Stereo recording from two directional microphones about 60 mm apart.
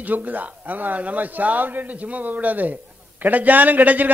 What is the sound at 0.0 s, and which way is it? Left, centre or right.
Speech, right.